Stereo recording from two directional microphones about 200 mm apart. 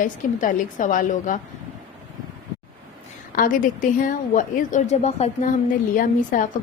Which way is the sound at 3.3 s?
45° left (ahead or behind).